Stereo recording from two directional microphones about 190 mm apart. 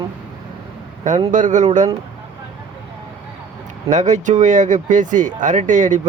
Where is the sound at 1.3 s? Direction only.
40° right (ahead or behind).